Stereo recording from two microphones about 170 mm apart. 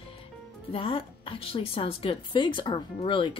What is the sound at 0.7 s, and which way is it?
A woman's voice, 30° left (ahead or behind).